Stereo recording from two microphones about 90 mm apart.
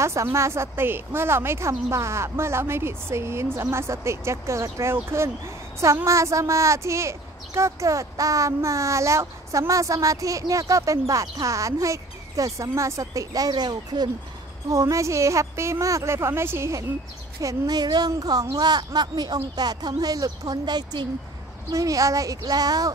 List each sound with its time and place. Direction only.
0.0 s a woman's voice: 35° right (ahead or behind); by 14.1 s 50° right (ahead or behind)
14.7 s speech: 35° right (ahead or behind)
17.4 s a woman's voice: 40° right (ahead or behind)
21.6 s speech: 40° right (ahead or behind)